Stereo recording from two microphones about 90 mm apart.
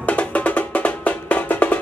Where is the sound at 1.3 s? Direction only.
20° left (ahead or behind).